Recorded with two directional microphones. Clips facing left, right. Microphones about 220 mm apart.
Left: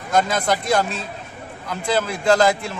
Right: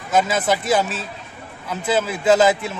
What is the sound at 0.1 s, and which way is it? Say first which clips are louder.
A man's voice: right 1 dB; 5° right (ahead or behind).